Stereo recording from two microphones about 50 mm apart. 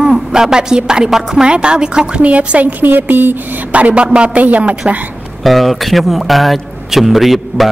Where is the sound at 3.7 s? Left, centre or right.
Right.